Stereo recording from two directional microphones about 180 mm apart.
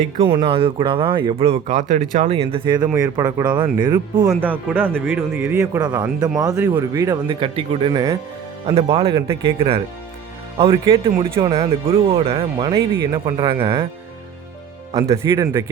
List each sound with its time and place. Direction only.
0.0 s speech: 30° right (ahead or behind)
4.4 s speech: 10° right (ahead or behind)
8.6 s speech: 30° right (ahead or behind)
14.9 s speech: 15° right (ahead or behind)